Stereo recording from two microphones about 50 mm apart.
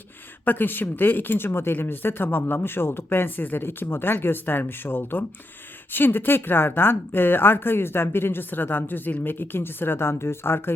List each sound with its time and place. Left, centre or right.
0.4 s speech: left